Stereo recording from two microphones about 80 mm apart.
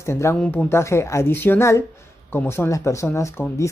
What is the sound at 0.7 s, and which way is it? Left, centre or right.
Speech, left.